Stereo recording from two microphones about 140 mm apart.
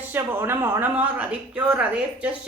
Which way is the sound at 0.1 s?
15° right (ahead or behind).